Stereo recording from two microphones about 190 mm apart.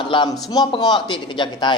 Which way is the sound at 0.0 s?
25° left (ahead or behind).